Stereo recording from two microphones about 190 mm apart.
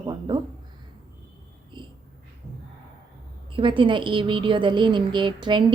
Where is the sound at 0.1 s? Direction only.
20° right (ahead or behind).